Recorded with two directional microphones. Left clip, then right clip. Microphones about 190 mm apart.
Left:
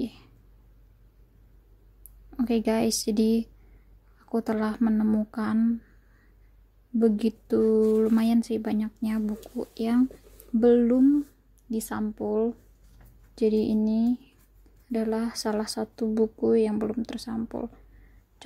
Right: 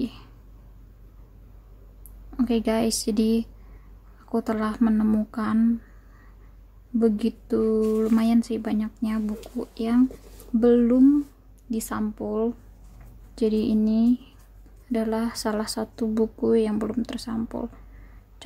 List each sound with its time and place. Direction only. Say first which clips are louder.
0.0 s a sound: right 3 dB; 15° left (ahead or behind)
2.3 s a woman's voice: right 2 dB; 20° left (ahead or behind)
7.0 s a woman's voice: right 1 dB; 20° left (ahead or behind)